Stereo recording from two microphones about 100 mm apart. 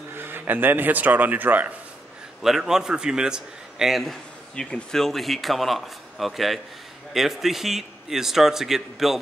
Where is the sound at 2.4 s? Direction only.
5° right (ahead or behind).